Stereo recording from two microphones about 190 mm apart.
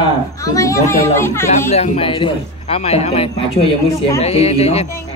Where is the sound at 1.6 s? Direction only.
35° left (ahead or behind).